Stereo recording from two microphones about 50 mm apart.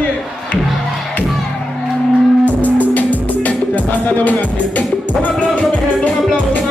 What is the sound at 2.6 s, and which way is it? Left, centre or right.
Music, left.